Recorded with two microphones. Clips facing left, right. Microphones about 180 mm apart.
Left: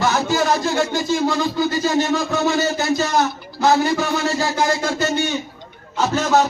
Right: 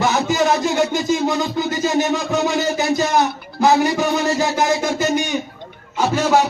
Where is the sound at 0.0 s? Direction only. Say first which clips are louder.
Right 1 dB; 15° right (ahead or behind).